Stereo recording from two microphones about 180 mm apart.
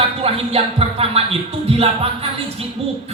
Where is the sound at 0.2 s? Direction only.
30° right (ahead or behind).